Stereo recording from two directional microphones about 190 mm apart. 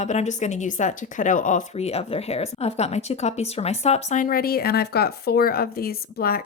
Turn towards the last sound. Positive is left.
turn(degrees=50)  # may be behind; listen again after turning